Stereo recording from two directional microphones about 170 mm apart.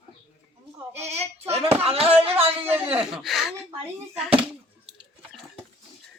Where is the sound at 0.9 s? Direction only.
40° right (ahead or behind).